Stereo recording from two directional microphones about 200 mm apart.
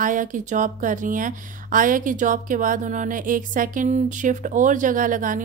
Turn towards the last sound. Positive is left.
turn(degrees=-40)  # may be behind; listen again after turning